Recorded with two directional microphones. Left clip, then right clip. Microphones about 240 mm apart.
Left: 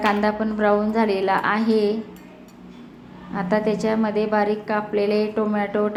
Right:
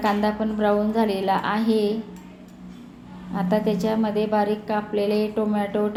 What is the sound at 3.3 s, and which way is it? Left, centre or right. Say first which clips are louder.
A woman's voice: left 2 dB; centre.